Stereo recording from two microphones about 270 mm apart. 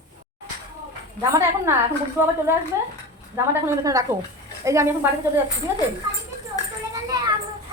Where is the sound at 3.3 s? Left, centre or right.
Centre.